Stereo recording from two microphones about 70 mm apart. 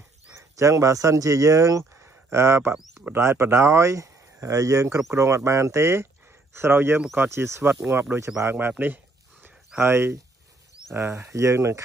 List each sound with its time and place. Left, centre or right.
0.4 s speech: right
7.6 s speech: centre
7.9 s speech: right
8.5 s a sound: right
9.8 s speech: right